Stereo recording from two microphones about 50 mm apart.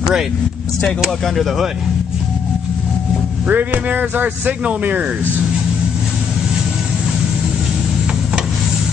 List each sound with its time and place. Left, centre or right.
1.2 s speech: centre
3.4 s speech: right